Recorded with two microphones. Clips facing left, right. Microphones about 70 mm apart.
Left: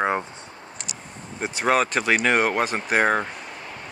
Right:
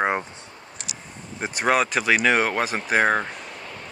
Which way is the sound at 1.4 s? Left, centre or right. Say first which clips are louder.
Even; centre.